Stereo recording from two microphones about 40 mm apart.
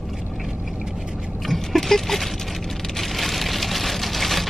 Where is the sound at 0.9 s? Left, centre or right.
Centre.